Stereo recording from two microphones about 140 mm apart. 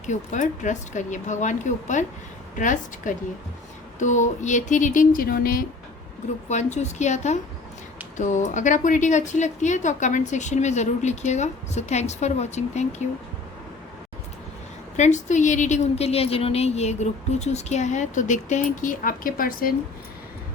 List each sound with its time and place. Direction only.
0.0 s a woman's voice: 60° left (ahead or behind); by 5.6 s 90° left
6.5 s speech: 55° left (ahead or behind)
14.9 s speech: 60° left (ahead or behind); by 19.7 s 90° left